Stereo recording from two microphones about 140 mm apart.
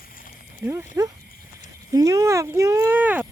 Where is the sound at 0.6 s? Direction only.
20° right (ahead or behind).